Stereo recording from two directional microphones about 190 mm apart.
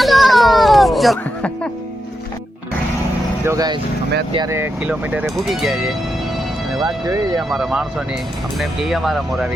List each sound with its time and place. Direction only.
0.0 s music: centre (ahead or behind)
3.4 s speech: 20° right (ahead or behind); by 5.8 s centre (ahead or behind)
6.7 s speech: 20° right (ahead or behind)
7.5 s speech: centre (ahead or behind)